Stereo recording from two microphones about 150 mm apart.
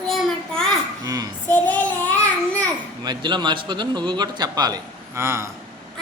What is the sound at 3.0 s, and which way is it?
A man's voice, 30° right (ahead or behind).